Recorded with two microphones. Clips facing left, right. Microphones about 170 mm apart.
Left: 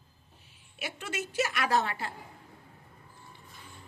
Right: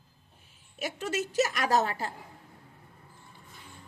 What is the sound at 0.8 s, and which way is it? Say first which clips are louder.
A woman's voice: right 5 dB; 40° right (ahead or behind).